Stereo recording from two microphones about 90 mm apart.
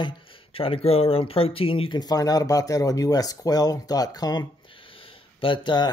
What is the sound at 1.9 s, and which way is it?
Speech, 45° left (ahead or behind).